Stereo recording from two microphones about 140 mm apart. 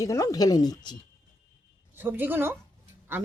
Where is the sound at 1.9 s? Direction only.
15° right (ahead or behind).